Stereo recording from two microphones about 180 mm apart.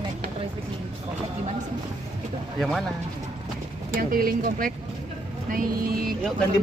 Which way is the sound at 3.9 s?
55° right (ahead or behind).